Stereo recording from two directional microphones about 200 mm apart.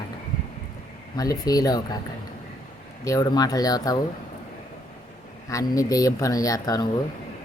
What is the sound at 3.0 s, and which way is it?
Speech, 20° left (ahead or behind).